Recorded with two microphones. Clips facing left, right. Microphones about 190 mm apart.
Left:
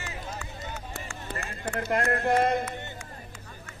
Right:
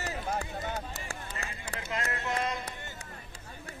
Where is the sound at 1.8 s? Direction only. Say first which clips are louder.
Left 9 dB; 55° left (ahead or behind).